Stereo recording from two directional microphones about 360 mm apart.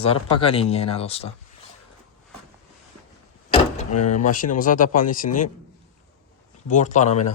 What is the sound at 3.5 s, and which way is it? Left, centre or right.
Speech, centre.